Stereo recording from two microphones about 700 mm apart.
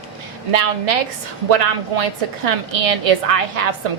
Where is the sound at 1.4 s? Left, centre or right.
Right.